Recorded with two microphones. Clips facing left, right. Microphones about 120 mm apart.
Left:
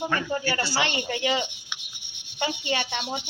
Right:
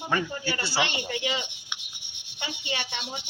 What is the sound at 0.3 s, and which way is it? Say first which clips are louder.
A woman's voice: left 5 dB; 45° left (ahead or behind).